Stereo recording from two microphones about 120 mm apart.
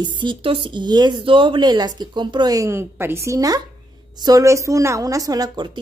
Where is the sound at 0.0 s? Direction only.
40° right (ahead or behind).